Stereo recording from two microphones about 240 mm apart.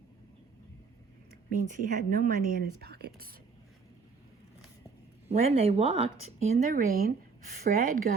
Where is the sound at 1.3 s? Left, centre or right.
Right.